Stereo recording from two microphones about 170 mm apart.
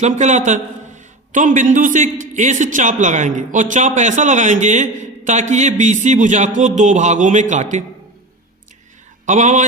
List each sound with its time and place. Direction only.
0.0 s a man's voice: 45° right (ahead or behind)
9.2 s a man's voice: 45° right (ahead or behind)